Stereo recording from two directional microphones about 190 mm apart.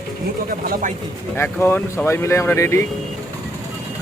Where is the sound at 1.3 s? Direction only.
10° left (ahead or behind).